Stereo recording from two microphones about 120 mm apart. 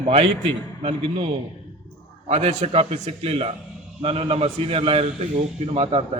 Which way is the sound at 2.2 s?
65° right (ahead or behind).